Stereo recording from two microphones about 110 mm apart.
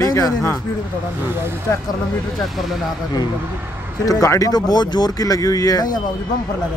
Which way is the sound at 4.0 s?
30° left (ahead or behind).